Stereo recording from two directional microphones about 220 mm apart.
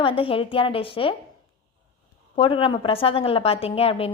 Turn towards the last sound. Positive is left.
turn(degrees=25)  # may be behind; listen again after turning